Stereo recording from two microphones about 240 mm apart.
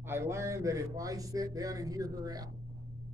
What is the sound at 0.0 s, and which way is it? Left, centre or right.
Speech, centre.